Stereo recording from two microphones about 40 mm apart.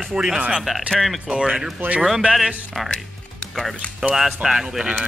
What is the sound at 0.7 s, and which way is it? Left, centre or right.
Speech, centre.